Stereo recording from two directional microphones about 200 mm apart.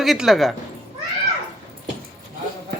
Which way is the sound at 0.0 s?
Centre (ahead or behind).